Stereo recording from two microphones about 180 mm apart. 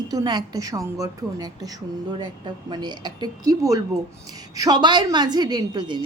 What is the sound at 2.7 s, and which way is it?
A woman's voice, 25° right (ahead or behind).